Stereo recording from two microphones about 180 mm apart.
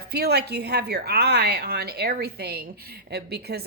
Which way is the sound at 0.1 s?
65° right (ahead or behind).